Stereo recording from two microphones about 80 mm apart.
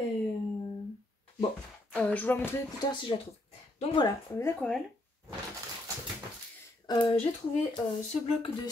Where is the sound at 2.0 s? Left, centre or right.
Centre.